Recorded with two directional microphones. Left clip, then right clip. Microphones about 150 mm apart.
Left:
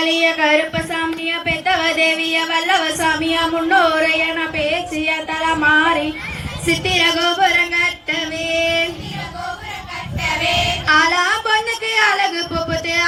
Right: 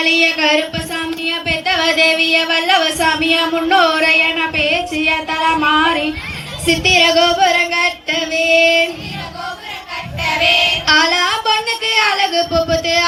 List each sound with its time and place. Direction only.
0.0 s music: 25° left (ahead or behind)
6.7 s female singing: 25° left (ahead or behind)
10.3 s child singing: 25° left (ahead or behind)